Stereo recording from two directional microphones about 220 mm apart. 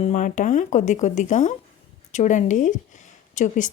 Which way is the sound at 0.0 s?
35° left (ahead or behind).